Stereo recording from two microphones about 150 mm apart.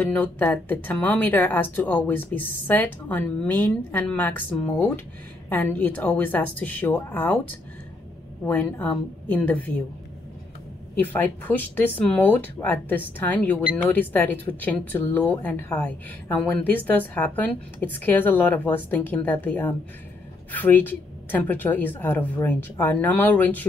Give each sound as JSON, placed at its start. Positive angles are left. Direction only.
{"t": 0.0, "sound": "speech", "side_deg": 10}
{"t": 8.5, "sound": "speech", "side_deg": 10}
{"t": 11.0, "sound": "speech", "side_deg": 15}